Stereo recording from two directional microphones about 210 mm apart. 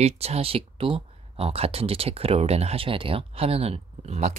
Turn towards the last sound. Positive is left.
turn(degrees=-30)  # may be behind; listen again after turning